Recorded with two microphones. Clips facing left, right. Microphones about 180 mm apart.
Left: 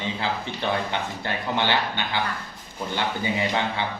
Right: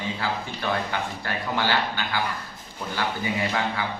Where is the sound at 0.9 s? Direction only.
25° left (ahead or behind).